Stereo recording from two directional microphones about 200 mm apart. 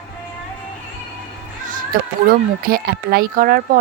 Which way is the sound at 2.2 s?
45° right (ahead or behind).